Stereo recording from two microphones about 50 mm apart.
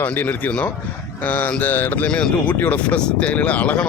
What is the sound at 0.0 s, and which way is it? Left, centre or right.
Speech, left.